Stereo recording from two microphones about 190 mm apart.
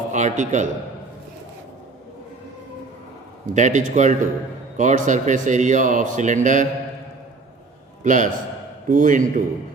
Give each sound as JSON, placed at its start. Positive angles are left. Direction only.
{"t": 0.1, "sound": "a man's voice", "side_deg": -40}
{"t": 3.4, "sound": "speech", "side_deg": -40}
{"t": 8.0, "sound": "a man's voice", "side_deg": -40}